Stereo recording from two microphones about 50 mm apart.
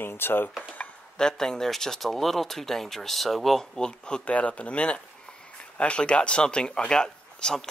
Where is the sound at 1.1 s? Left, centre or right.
Centre.